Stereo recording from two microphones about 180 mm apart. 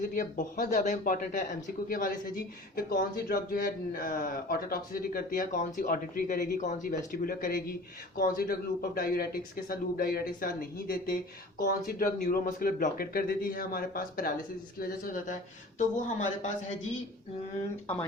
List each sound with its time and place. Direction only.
0.1 s speech: 50° left (ahead or behind)